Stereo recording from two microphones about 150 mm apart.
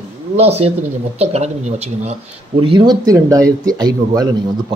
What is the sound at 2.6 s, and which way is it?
A man's voice, 35° right (ahead or behind).